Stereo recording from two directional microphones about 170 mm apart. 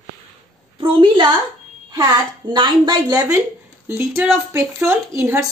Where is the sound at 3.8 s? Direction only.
15° right (ahead or behind).